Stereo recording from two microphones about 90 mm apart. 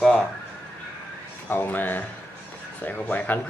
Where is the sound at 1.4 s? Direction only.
20° left (ahead or behind).